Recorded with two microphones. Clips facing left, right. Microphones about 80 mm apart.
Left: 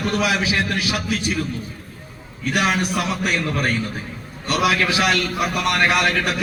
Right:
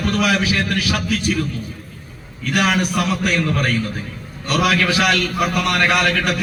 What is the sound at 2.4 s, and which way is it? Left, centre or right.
A man's voice, left.